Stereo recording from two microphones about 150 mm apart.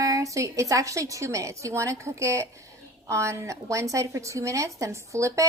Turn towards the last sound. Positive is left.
turn(degrees=-20)  # may be behind; listen again after turning